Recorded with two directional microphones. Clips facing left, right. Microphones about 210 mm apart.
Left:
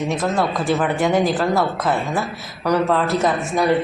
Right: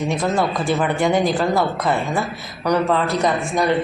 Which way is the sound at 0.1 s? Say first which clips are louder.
Right 1 dB; centre (ahead or behind).